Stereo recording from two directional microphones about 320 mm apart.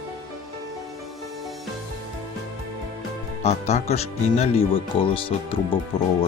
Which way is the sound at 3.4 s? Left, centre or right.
Centre.